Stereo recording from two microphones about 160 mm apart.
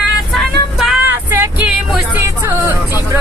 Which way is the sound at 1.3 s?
15° right (ahead or behind).